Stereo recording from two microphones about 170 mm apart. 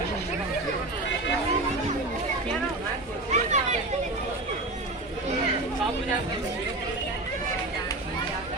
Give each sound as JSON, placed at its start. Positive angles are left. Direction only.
{"t": 3.3, "sound": "chatter", "side_deg": -45}